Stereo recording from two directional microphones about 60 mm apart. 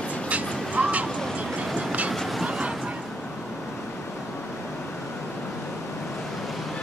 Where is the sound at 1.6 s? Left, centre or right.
Centre.